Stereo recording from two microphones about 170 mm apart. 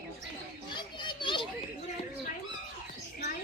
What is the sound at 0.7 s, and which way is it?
Children playing, 25° left (ahead or behind).